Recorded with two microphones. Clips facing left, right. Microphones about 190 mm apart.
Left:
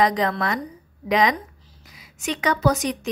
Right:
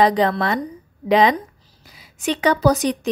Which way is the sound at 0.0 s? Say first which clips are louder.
Right 4 dB; 30° right (ahead or behind).